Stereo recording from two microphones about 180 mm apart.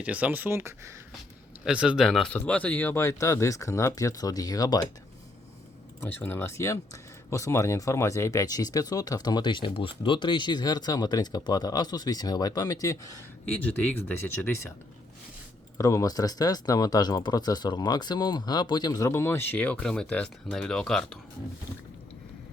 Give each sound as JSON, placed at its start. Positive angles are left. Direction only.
{"t": 0.0, "sound": "speech", "side_deg": -10}
{"t": 6.0, "sound": "speech", "side_deg": 10}
{"t": 15.8, "sound": "speech", "side_deg": 20}